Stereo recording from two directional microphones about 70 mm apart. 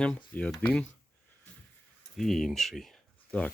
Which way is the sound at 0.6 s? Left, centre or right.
Centre.